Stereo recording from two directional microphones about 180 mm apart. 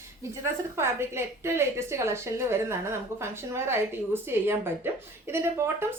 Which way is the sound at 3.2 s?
15° right (ahead or behind).